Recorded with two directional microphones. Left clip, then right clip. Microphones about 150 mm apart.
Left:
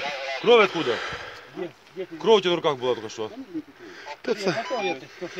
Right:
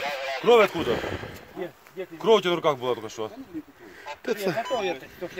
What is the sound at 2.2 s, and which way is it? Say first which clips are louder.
Speech: left 1 dB; 90° right.